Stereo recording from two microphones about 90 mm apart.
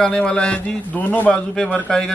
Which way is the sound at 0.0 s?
10° left (ahead or behind).